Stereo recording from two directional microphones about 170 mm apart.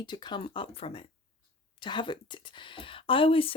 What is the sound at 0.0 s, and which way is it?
A woman's voice, 25° left (ahead or behind).